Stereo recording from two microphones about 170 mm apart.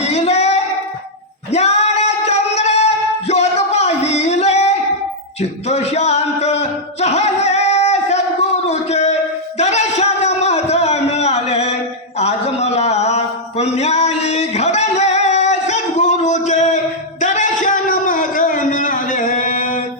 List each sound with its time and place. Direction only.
0.1 s child singing: 40° left (ahead or behind)
1.5 s singing: 40° left (ahead or behind)
5.4 s a sound: 40° left (ahead or behind)